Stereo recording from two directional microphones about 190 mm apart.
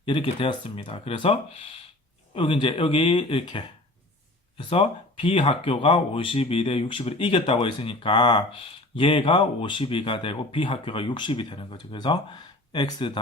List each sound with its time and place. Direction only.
0.0 s speech: 25° left (ahead or behind)